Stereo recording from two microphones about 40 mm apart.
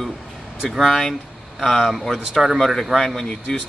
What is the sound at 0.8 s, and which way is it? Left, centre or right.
Speech, centre.